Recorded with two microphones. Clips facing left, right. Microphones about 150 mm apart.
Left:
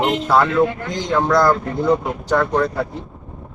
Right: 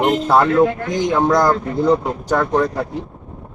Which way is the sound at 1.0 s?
20° right (ahead or behind).